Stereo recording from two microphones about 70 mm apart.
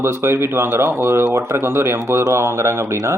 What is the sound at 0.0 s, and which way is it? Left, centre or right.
Speech, right.